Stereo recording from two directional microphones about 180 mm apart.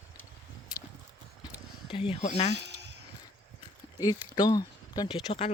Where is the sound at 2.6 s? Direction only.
70° right (ahead or behind).